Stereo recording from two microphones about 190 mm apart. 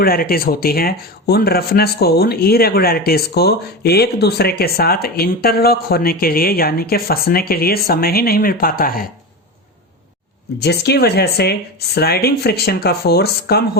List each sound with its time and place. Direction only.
0.0 s speech: 50° left (ahead or behind)
10.6 s speech: 60° left (ahead or behind)